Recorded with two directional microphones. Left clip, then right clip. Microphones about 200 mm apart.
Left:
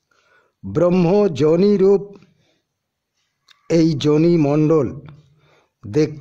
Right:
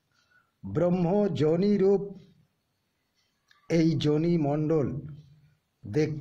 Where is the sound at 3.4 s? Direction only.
30° left (ahead or behind).